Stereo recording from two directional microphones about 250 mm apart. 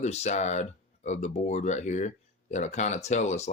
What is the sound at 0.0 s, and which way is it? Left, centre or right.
Speech, left.